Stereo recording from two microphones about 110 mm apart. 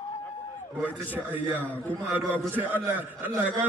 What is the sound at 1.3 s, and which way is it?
Speech, 15° right (ahead or behind).